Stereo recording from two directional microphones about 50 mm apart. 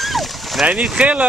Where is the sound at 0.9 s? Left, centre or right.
Right.